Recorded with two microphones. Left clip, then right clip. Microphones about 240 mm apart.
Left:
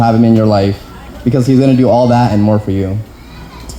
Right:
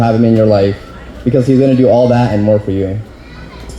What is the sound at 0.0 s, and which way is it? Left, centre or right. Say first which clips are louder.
Speech: even; left.